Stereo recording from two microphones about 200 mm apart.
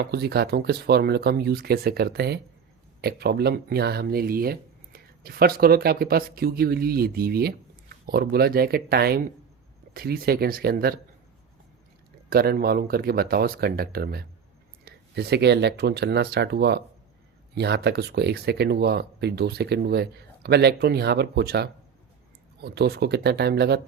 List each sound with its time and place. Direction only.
0.0 s speech: 55° right (ahead or behind)
12.3 s speech: 50° right (ahead or behind)